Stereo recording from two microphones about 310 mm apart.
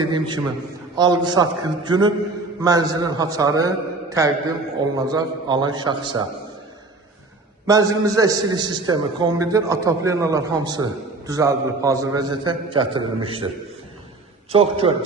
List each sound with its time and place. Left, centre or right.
0.0 s a sound: centre
0.9 s a man's voice: centre
7.7 s a man's voice: centre
14.5 s a man's voice: centre